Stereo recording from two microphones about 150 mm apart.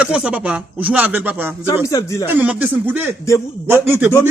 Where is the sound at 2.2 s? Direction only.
10° right (ahead or behind).